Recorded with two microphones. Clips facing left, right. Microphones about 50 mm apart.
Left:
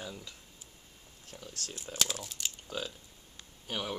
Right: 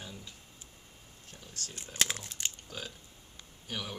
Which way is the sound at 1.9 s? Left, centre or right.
Right.